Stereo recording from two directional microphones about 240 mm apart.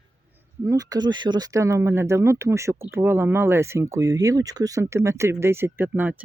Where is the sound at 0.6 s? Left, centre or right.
Centre.